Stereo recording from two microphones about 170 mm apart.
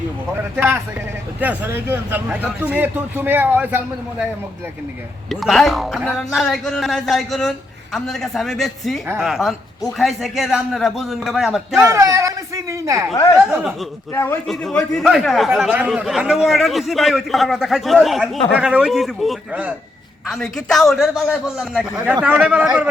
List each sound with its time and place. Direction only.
0.5 s speech: 10° right (ahead or behind)
5.3 s a man's voice: centre (ahead or behind)
11.8 s a woman's voice: 15° right (ahead or behind)
13.3 s a man's voice: 5° right (ahead or behind)
14.1 s a man's voice: 15° left (ahead or behind)
14.4 s a man's voice: 5° left (ahead or behind)